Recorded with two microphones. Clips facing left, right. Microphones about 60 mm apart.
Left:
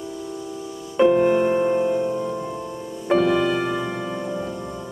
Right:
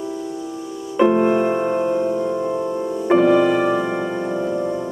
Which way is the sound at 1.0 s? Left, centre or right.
Centre.